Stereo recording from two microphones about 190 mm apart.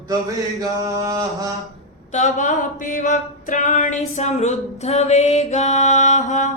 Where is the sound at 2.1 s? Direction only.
40° left (ahead or behind).